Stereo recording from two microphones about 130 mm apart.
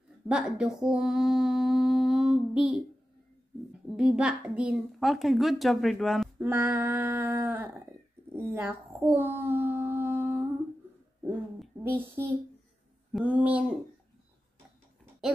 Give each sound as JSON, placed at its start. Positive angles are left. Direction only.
{"t": 0.3, "sound": "a woman's voice", "side_deg": -5}
{"t": 0.8, "sound": "mantra", "side_deg": -5}
{"t": 3.9, "sound": "a woman's voice", "side_deg": -5}
{"t": 6.4, "sound": "a sound", "side_deg": -15}
{"t": 11.8, "sound": "a child's voice", "side_deg": -15}